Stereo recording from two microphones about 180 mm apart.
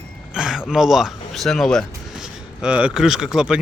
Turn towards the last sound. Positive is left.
turn(degrees=-5)  # may be behind; listen again after turning